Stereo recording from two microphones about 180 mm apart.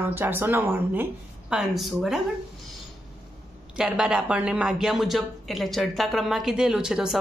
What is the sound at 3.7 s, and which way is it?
Speech, 5° right (ahead or behind).